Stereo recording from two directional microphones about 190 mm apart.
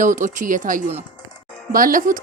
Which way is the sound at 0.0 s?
40° right (ahead or behind).